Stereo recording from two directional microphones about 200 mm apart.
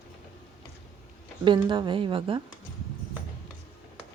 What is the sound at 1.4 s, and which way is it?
Speech, 25° right (ahead or behind).